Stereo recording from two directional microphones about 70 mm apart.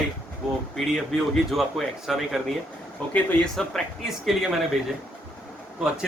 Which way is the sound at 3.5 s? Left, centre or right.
Centre.